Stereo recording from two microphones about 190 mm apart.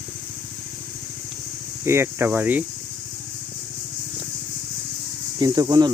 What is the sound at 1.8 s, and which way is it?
Speech, 15° right (ahead or behind).